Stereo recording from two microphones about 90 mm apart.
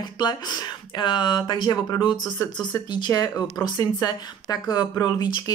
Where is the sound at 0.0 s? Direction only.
55° left (ahead or behind).